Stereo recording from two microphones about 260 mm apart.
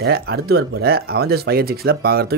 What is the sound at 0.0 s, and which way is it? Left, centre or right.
Speech, right.